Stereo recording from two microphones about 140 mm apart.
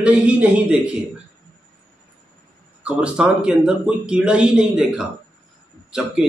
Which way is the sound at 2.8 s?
10° right (ahead or behind).